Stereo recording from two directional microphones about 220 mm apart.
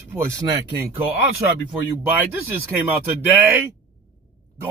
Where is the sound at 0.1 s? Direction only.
15° right (ahead or behind).